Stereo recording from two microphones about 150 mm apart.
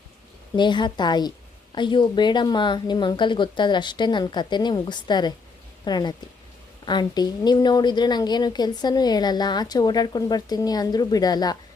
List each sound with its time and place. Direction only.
0.5 s a woman's voice: 30° left (ahead or behind)